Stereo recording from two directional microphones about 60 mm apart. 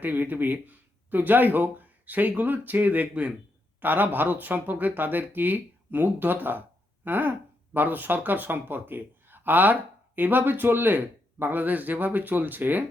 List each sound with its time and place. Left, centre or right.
0.0 s speech: right